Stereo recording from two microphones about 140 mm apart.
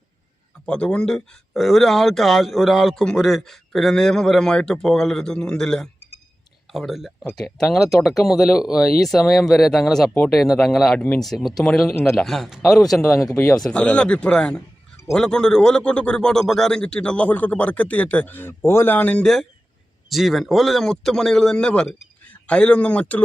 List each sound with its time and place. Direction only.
0.6 s speech: 5° left (ahead or behind)
13.3 s speech: 20° left (ahead or behind)
13.6 s speech: 10° left (ahead or behind)